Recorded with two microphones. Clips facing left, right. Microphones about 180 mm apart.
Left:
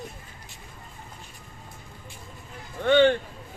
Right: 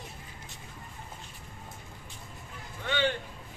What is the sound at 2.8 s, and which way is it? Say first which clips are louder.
Music: left 11 dB; 55° left (ahead or behind).